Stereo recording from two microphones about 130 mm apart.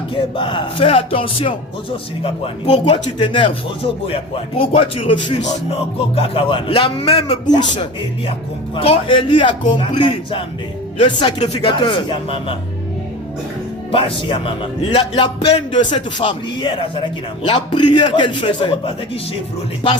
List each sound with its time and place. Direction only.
0.1 s music: 40° left (ahead or behind)
3.2 s music: 35° left (ahead or behind)
8.7 s a man's voice: 45° left (ahead or behind)
11.6 s a man's voice: 40° left (ahead or behind)
13.9 s a man's voice: 45° left (ahead or behind)